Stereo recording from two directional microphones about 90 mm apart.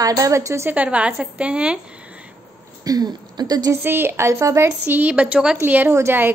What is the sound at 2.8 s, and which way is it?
Speech, 45° right (ahead or behind).